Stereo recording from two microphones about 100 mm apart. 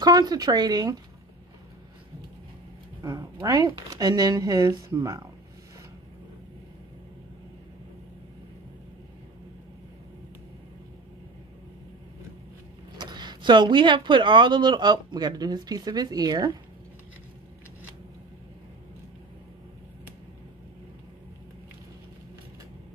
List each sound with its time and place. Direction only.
0.0 s speech: 45° right (ahead or behind)
3.0 s speech: 35° right (ahead or behind)
12.9 s speech: 45° right (ahead or behind)